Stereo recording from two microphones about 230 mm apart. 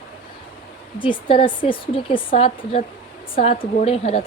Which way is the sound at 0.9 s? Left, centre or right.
Left.